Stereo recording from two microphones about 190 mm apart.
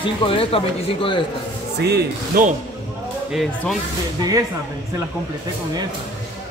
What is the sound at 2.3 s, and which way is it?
Speech, 50° right (ahead or behind).